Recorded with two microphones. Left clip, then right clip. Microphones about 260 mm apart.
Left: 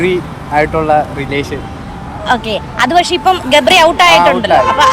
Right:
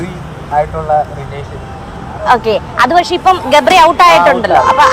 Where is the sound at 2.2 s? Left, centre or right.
Centre.